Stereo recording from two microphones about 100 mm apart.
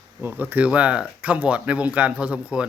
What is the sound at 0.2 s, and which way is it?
Speech, 20° right (ahead or behind).